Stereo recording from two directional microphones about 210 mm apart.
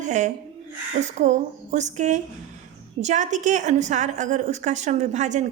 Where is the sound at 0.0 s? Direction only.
35° right (ahead or behind).